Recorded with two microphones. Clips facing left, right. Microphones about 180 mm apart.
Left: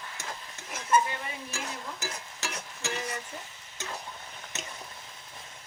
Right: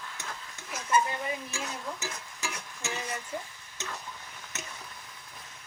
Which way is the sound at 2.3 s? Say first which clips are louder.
Left 1 dB; 20° left (ahead or behind).